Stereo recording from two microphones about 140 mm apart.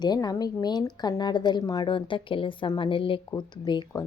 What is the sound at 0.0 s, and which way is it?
A woman's voice, 30° left (ahead or behind).